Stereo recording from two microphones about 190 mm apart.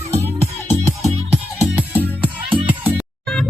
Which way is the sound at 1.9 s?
10° left (ahead or behind).